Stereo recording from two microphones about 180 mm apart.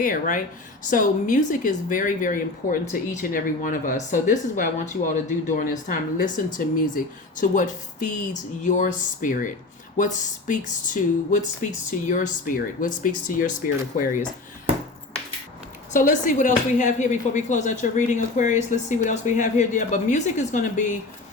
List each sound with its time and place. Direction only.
0.0 s speech: 50° left (ahead or behind)
15.9 s speech: 45° left (ahead or behind)